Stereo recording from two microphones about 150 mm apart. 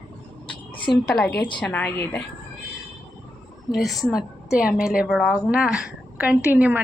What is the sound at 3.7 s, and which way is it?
A woman's voice, centre (ahead or behind).